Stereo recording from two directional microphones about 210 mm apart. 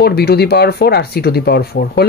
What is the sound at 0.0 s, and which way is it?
Speech, 50° left (ahead or behind).